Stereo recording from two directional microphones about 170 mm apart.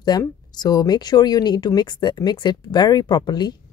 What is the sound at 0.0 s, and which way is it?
Speech, 25° left (ahead or behind).